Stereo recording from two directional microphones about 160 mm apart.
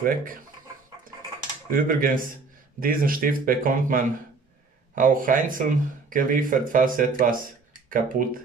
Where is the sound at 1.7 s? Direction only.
60° right (ahead or behind).